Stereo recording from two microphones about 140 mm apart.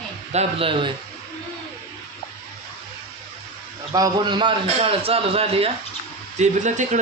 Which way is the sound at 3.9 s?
30° right (ahead or behind).